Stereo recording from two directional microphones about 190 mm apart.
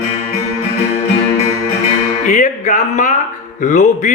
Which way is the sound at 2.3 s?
40° left (ahead or behind).